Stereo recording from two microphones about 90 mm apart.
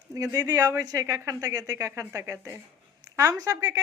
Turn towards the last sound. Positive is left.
turn(degrees=-40)  # may be behind; listen again after turning